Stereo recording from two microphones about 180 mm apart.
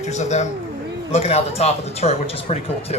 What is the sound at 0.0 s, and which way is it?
A man's voice, 40° left (ahead or behind).